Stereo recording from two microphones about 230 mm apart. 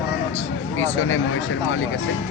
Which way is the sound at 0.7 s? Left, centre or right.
Left.